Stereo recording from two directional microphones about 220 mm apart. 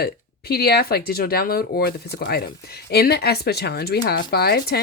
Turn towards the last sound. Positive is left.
turn(degrees=45)  # may be behind; listen again after turning